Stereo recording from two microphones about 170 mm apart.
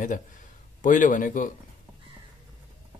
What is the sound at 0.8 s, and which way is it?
Speech, 50° left (ahead or behind).